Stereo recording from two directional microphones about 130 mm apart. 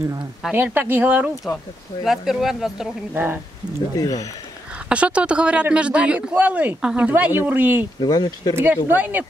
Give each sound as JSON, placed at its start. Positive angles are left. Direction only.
{"t": 0.6, "sound": "speech", "side_deg": -15}
{"t": 2.0, "sound": "speech", "side_deg": 0}
{"t": 3.9, "sound": "speech", "side_deg": 25}
{"t": 4.8, "sound": "speech", "side_deg": -10}
{"t": 8.0, "sound": "speech", "side_deg": 30}
{"t": 8.5, "sound": "speech", "side_deg": -15}